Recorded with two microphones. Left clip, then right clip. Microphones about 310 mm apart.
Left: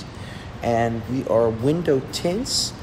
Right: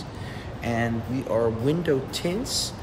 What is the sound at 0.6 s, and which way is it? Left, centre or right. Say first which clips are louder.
Speech: left 6 dB; centre.